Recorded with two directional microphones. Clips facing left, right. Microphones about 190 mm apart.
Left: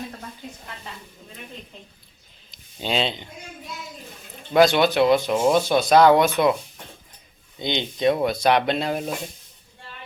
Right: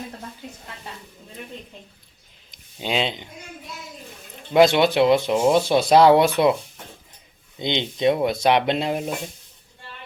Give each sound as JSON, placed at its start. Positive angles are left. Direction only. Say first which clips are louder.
{"t": 2.5, "sound": "a sound", "louder": "even", "side_deg": -15}
{"t": 4.5, "sound": "speech", "louder": "right 1 dB", "side_deg": -25}
{"t": 7.6, "sound": "speech", "louder": "right 1 dB", "side_deg": -25}